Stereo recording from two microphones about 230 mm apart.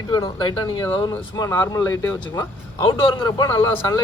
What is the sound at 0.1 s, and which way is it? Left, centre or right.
Speech, centre.